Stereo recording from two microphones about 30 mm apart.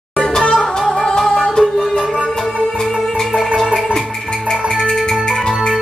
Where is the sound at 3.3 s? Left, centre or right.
Right.